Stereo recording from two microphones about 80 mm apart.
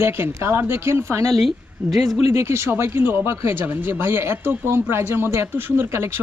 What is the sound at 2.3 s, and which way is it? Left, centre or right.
Speech, right.